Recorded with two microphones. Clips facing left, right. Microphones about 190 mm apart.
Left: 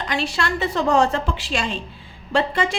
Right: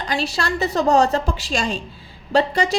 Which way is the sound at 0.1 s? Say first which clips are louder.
Right 1 dB; 35° right (ahead or behind).